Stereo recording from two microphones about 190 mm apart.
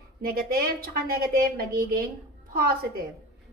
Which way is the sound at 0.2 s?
55° right (ahead or behind).